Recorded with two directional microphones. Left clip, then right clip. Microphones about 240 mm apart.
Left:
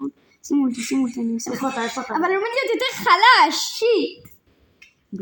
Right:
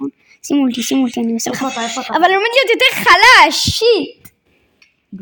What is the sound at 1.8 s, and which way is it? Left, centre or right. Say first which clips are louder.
Speech: right 11 dB; right.